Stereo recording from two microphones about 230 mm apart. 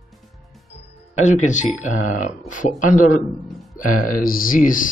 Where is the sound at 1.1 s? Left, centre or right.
Left.